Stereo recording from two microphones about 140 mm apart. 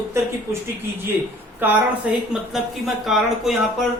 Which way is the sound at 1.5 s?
15° right (ahead or behind).